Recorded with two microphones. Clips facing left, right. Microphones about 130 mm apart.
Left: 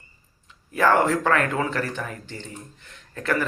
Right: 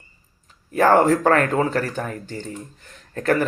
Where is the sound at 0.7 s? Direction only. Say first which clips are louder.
Right 4 dB; 40° right (ahead or behind).